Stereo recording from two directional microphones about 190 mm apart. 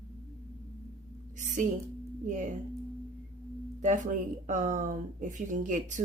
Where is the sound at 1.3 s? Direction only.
40° right (ahead or behind).